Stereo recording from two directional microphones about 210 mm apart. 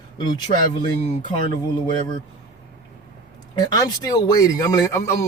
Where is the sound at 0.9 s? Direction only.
35° left (ahead or behind).